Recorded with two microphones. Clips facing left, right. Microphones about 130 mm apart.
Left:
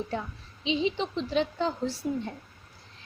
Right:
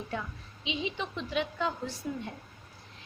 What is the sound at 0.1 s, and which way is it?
A woman's voice, 35° left (ahead or behind).